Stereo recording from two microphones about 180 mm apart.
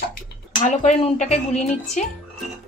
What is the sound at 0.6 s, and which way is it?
Speech, 40° left (ahead or behind).